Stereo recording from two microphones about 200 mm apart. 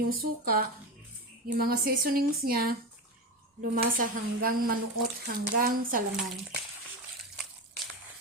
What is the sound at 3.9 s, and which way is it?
A woman's voice, 45° right (ahead or behind).